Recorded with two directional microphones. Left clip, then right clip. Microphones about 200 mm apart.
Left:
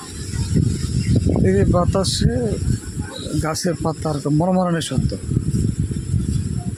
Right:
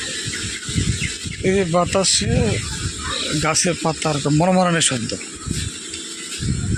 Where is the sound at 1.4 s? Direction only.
15° left (ahead or behind).